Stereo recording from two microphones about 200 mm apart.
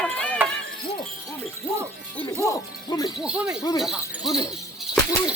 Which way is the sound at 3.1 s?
5° right (ahead or behind).